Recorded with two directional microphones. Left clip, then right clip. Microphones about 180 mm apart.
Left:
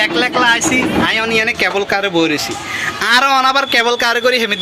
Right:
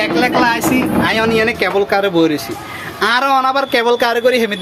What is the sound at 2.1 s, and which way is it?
Speech, 25° right (ahead or behind).